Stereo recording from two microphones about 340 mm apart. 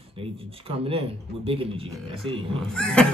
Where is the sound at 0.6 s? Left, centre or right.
Centre.